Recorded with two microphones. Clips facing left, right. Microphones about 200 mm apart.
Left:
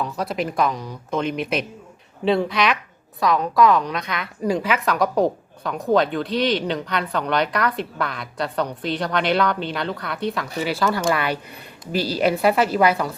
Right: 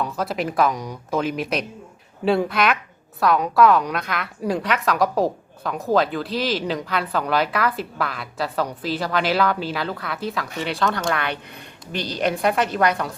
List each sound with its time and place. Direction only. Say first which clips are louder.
0.0 s a woman's voice: even; centre (ahead or behind)